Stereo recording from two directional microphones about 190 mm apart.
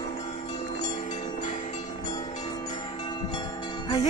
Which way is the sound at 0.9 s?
40° left (ahead or behind).